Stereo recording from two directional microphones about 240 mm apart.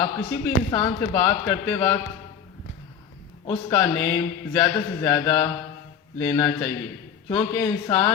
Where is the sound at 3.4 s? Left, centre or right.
Centre.